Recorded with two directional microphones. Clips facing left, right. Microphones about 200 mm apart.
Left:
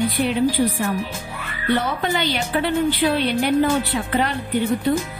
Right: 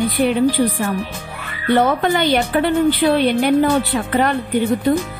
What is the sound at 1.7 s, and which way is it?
Speech, 50° right (ahead or behind).